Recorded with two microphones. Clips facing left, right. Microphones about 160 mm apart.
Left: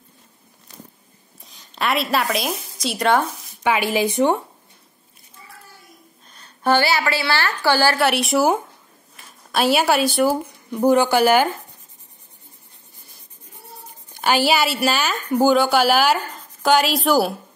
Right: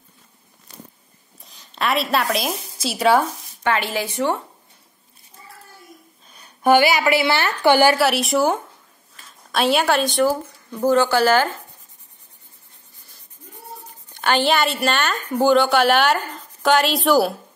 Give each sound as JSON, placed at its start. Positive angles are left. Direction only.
{"t": 1.4, "sound": "a woman's voice", "side_deg": 0}
{"t": 3.6, "sound": "speech", "side_deg": 10}
{"t": 6.3, "sound": "a woman's voice", "side_deg": -10}
{"t": 8.0, "sound": "a woman's voice", "side_deg": 0}
{"t": 14.1, "sound": "a woman's voice", "side_deg": 10}